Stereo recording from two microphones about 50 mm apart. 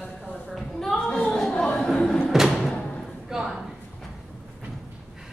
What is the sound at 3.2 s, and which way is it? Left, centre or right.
Speech, centre.